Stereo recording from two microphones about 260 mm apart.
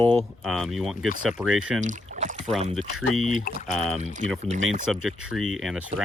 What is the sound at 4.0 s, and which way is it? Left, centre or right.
Speech, right.